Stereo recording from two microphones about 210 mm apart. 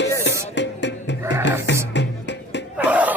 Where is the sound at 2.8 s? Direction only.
5° right (ahead or behind).